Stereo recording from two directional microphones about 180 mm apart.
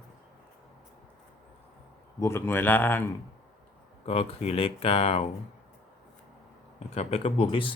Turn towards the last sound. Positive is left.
turn(degrees=30)  # may be behind; listen again after turning